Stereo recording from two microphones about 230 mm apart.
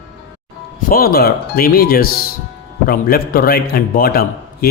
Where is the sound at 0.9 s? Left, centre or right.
Left.